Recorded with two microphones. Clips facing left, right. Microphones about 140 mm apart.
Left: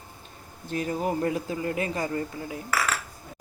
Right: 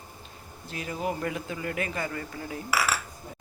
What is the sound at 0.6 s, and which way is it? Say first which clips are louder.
Speech: left 4 dB; 40° left (ahead or behind).